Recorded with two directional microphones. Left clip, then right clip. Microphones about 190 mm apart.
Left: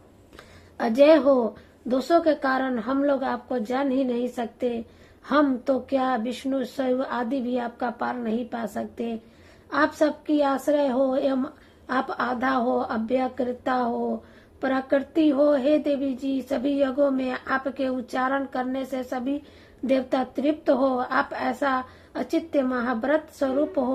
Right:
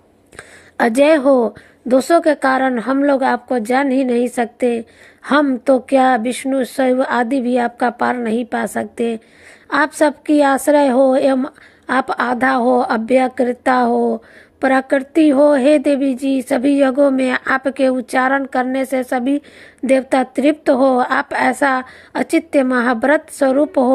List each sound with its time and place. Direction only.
0.3 s speech: 35° right (ahead or behind)